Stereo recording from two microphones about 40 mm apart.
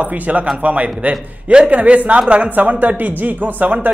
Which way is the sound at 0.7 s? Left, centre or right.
Right.